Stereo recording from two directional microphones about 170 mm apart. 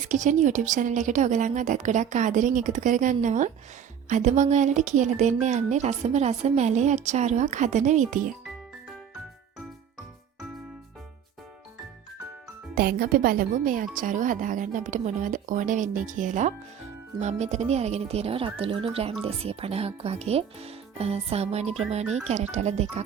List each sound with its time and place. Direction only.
0.1 s a woman's voice: 45° right (ahead or behind)
12.7 s a woman's voice: 60° right (ahead or behind); by 23.0 s 40° right (ahead or behind)